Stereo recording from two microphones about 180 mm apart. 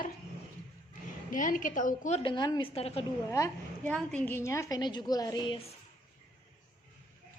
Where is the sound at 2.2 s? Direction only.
25° left (ahead or behind).